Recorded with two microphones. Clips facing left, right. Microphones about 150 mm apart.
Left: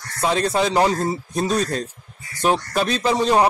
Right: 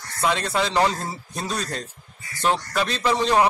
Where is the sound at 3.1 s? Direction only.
15° left (ahead or behind).